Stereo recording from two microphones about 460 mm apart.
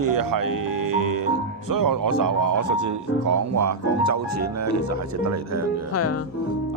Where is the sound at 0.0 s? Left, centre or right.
Right.